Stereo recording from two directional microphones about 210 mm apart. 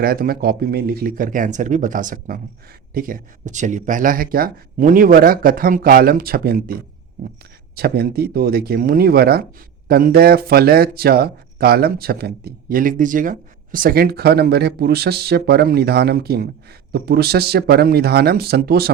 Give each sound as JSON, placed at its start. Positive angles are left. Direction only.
{"t": 0.0, "sound": "speech", "side_deg": -45}
{"t": 7.8, "sound": "speech", "side_deg": -50}